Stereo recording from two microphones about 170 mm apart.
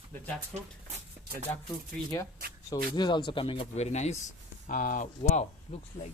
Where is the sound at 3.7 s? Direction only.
40° left (ahead or behind).